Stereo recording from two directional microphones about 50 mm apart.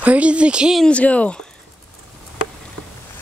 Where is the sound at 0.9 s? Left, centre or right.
Left.